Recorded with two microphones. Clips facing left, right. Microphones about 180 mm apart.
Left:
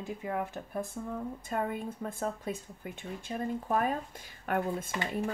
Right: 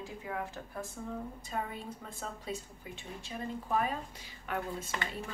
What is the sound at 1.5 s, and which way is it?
A woman's voice, 55° left (ahead or behind).